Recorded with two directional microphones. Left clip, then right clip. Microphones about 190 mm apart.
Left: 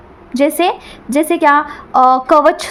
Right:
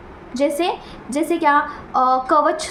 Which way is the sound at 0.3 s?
50° left (ahead or behind).